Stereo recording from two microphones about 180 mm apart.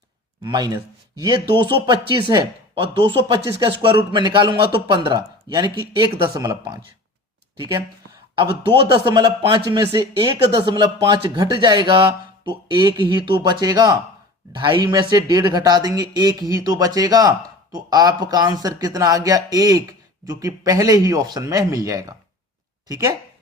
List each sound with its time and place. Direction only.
0.4 s speech: 20° right (ahead or behind)
8.4 s speech: 25° right (ahead or behind)